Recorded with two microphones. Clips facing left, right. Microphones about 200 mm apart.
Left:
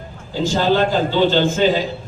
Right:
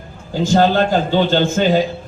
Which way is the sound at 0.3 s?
50° right (ahead or behind).